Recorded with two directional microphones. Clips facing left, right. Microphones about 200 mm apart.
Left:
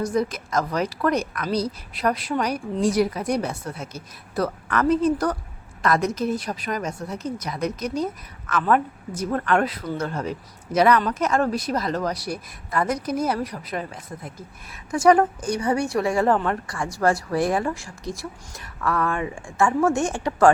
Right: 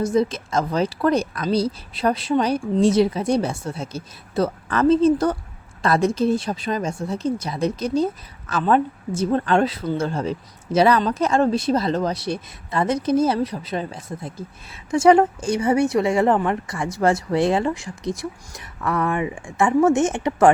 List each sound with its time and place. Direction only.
0.0 s speech: 25° right (ahead or behind)